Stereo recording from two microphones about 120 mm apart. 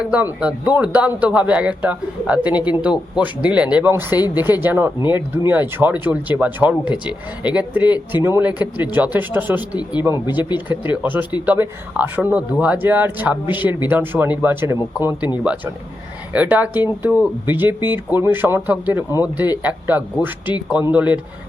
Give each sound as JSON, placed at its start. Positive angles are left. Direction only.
{"t": 0.0, "sound": "speech", "side_deg": -10}
{"t": 16.3, "sound": "speech", "side_deg": -10}